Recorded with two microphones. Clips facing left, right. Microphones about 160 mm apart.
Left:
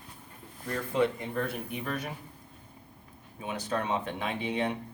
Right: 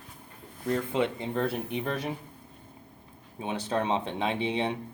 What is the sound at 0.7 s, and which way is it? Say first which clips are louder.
Speech: right 1 dB; 20° right (ahead or behind).